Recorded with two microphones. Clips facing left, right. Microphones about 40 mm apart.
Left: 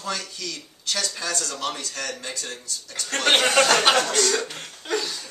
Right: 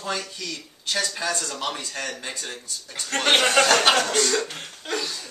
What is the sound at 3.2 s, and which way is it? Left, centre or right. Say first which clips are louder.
Speech: even; centre.